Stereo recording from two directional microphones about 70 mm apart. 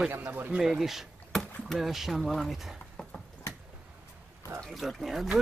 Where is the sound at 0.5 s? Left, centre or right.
Centre.